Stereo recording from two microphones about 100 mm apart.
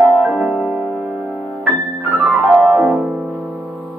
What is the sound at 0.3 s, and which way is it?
Music, centre (ahead or behind).